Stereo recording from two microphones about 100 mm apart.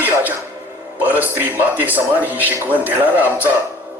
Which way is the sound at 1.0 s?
15° right (ahead or behind).